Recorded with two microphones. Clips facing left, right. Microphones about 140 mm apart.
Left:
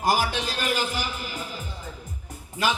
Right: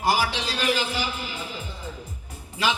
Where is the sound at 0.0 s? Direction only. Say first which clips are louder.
Even; 45° left (ahead or behind).